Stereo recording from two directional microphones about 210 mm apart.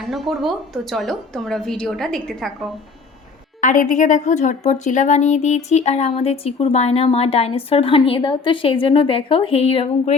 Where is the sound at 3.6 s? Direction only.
40° left (ahead or behind).